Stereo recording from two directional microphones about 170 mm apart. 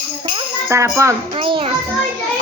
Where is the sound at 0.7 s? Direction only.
15° right (ahead or behind).